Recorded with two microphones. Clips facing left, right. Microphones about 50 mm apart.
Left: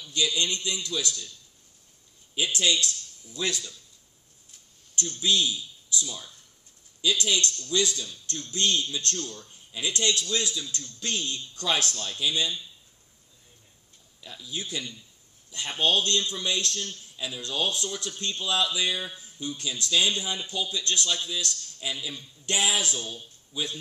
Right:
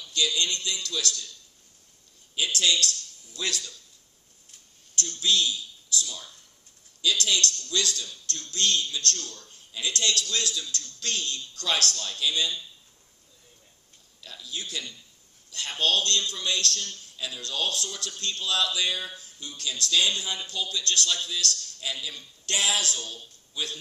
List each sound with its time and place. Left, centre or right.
0.0 s a man's voice: centre
2.3 s a man's voice: centre
4.9 s a man's voice: centre
14.2 s a man's voice: centre